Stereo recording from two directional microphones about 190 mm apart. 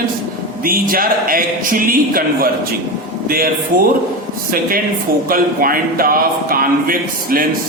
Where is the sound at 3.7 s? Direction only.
45° right (ahead or behind).